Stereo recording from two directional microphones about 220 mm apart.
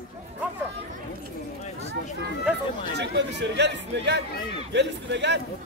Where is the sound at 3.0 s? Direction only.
50° right (ahead or behind).